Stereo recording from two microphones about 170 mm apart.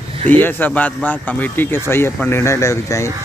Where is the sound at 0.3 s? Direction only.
10° left (ahead or behind).